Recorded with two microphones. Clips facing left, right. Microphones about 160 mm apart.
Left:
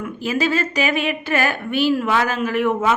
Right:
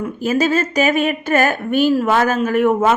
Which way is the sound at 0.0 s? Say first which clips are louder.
Right 4 dB; 45° right (ahead or behind).